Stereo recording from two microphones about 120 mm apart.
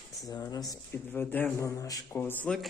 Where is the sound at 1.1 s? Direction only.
15° left (ahead or behind).